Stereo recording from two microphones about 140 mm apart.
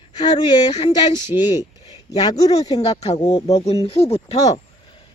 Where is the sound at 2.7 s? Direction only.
45° left (ahead or behind).